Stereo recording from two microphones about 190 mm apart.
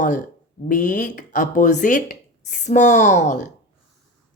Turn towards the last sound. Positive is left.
turn(degrees=40)  # may be behind; listen again after turning